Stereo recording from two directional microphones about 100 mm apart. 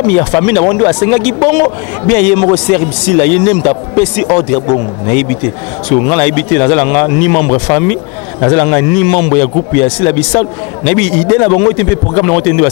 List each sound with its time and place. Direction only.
0.1 s speech: 20° left (ahead or behind)